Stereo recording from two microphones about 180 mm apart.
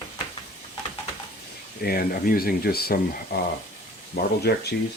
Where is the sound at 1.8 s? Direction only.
55° left (ahead or behind).